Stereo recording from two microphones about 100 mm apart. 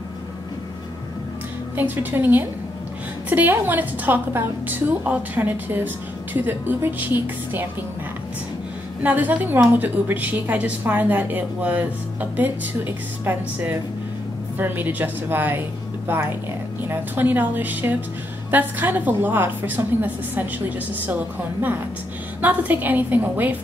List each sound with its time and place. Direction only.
1.8 s a woman's voice: 20° right (ahead or behind)
9.0 s a woman's voice: 15° right (ahead or behind)